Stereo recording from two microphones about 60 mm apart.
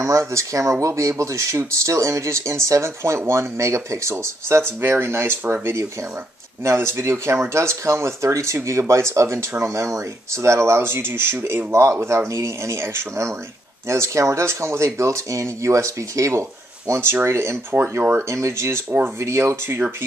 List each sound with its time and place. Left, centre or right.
0.0 s speech: right
12.3 s speech: right
18.3 s speech: right